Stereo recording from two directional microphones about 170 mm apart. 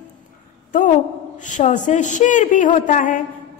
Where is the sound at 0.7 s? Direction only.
50° left (ahead or behind).